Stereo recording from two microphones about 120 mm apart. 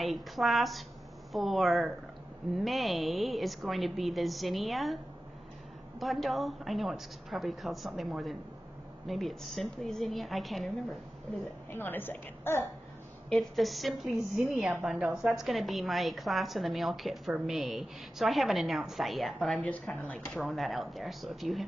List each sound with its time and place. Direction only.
0.0 s a woman's voice: centre (ahead or behind)
5.9 s a woman's voice: centre (ahead or behind)
11.7 s a woman's voice: 15° left (ahead or behind)
13.3 s a woman's voice: 5° left (ahead or behind)
20.3 s a woman's voice: centre (ahead or behind)